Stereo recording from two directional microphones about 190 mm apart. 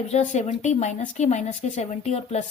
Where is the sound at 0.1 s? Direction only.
35° left (ahead or behind).